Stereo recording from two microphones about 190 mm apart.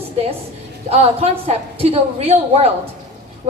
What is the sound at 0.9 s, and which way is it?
A woman's voice, 35° right (ahead or behind).